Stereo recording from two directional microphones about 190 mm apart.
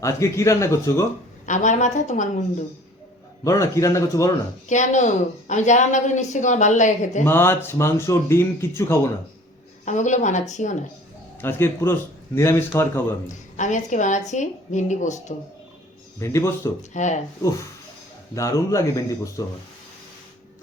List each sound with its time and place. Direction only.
0.0 s speech: 15° left (ahead or behind)
1.5 s a woman's voice: 40° left (ahead or behind)
3.4 s speech: 15° left (ahead or behind)
4.7 s a woman's voice: 40° left (ahead or behind)
7.3 s speech: 10° left (ahead or behind)
9.8 s a woman's voice: 40° left (ahead or behind)
11.3 s speech: 10° left (ahead or behind)
13.2 s a woman's voice: 40° left (ahead or behind)
16.1 s speech: 15° left (ahead or behind)
16.9 s a woman's voice: 40° left (ahead or behind)
18.3 s speech: 15° left (ahead or behind)